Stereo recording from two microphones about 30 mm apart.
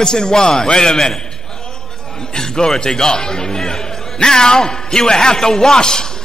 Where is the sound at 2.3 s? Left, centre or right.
Left.